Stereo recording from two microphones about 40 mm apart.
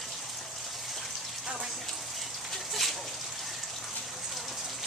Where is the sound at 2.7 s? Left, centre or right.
Centre.